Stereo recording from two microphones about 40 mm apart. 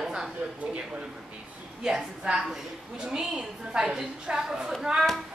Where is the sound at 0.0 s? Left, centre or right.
Centre.